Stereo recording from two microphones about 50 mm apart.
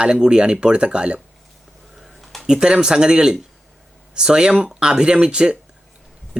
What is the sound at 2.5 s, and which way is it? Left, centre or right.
Speech, centre.